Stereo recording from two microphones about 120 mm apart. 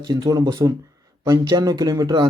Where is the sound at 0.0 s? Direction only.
35° right (ahead or behind).